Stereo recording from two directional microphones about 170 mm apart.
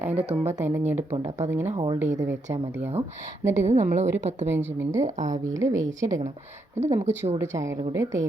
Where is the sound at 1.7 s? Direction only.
30° right (ahead or behind).